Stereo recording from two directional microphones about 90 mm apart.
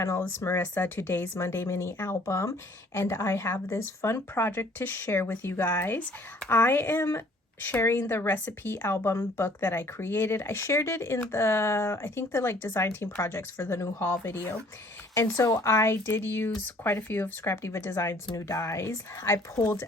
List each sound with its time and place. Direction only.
0.0 s a woman's voice: 35° left (ahead or behind)